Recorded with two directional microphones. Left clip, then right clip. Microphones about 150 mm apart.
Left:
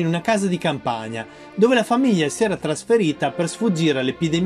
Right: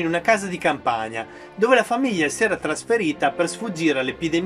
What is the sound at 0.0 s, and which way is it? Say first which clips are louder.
Speech: right 1 dB; 25° left (ahead or behind).